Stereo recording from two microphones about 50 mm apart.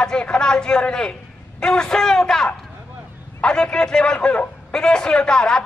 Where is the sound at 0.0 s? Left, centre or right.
Centre.